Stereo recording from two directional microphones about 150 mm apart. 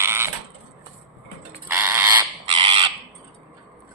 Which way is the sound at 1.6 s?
15° right (ahead or behind).